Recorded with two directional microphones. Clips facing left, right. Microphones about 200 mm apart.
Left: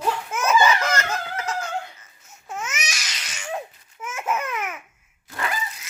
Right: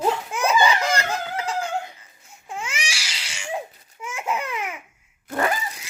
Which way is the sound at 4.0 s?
10° right (ahead or behind).